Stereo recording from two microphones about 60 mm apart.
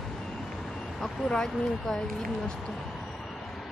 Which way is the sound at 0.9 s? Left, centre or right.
Centre.